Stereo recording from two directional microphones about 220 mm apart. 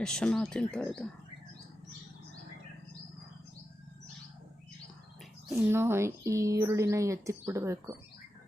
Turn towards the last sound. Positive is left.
turn(degrees=-15)  # may be behind; listen again after turning